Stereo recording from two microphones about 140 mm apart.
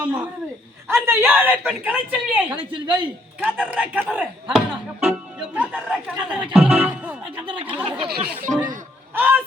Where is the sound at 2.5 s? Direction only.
35° right (ahead or behind).